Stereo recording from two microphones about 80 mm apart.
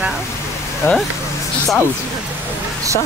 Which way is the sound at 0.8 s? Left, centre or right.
Left.